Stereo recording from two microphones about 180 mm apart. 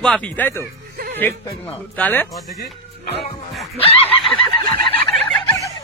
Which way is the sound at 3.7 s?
30° left (ahead or behind).